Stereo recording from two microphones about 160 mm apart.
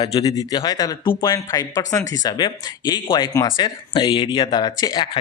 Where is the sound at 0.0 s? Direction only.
35° left (ahead or behind).